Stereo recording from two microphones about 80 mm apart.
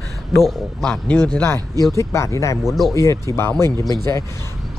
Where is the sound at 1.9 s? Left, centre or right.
Left.